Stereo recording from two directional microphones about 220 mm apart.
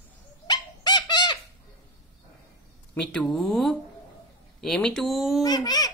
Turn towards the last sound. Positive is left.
turn(degrees=20)  # may be behind; listen again after turning